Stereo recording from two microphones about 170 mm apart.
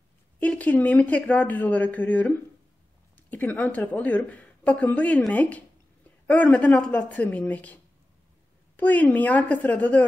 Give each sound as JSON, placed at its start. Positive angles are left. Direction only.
{"t": 0.4, "sound": "a woman's voice", "side_deg": 10}